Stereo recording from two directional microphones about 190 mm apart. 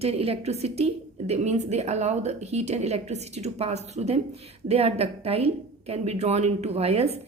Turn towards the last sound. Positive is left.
turn(degrees=-35)  # may be behind; listen again after turning